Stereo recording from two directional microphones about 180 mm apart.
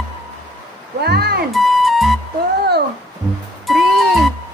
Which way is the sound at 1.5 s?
Centre (ahead or behind).